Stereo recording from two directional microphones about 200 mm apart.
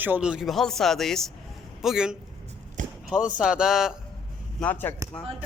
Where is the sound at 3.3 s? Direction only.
5° right (ahead or behind).